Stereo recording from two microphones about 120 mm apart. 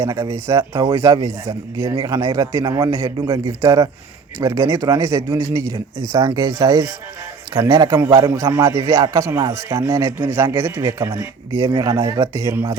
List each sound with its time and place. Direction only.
0.0 s a man's voice: 20° right (ahead or behind)
6.1 s speech: 35° right (ahead or behind)
8.2 s a man's voice: 20° right (ahead or behind)